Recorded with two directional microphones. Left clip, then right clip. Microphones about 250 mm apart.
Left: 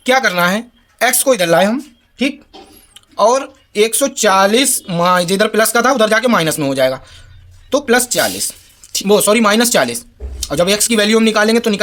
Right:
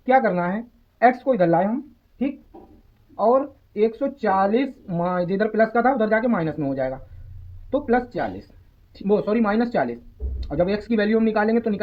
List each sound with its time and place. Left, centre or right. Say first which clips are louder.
0.0 s speech: left 6 dB; left